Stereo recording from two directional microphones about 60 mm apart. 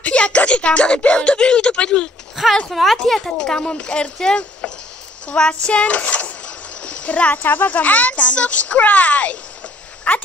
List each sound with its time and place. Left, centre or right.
0.0 s speech: left
2.7 s a woman's voice: centre
3.2 s speech: centre